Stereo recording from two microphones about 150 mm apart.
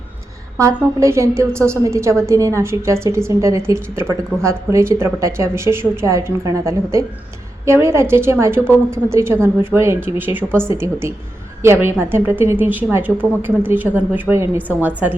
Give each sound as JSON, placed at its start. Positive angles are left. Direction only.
{"t": 0.5, "sound": "a woman's voice", "side_deg": -20}